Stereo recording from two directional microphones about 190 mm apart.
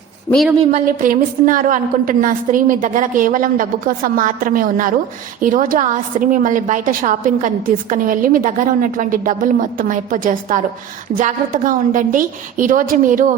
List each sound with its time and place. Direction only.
0.3 s speech: centre (ahead or behind)
0.7 s a woman's voice: 45° right (ahead or behind)